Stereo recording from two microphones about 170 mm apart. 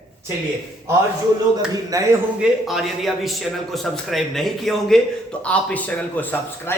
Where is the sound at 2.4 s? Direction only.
Centre (ahead or behind).